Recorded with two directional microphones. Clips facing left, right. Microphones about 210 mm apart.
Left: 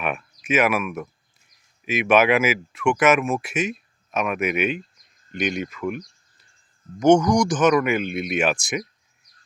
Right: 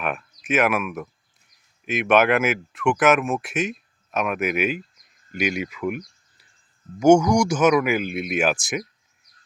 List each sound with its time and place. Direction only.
0.0 s speech: centre (ahead or behind)